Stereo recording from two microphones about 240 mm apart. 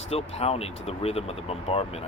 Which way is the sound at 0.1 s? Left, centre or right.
Left.